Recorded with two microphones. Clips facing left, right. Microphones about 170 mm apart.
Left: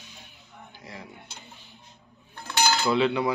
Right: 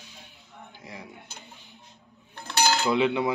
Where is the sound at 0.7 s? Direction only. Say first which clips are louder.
Even; 20° right (ahead or behind).